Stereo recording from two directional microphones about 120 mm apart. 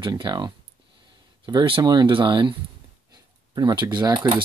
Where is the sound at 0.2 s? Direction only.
35° right (ahead or behind).